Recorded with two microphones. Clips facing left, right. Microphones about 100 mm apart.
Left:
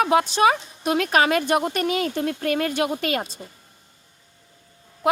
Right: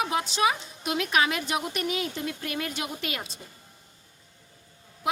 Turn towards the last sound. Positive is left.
turn(degrees=50)  # may be behind; listen again after turning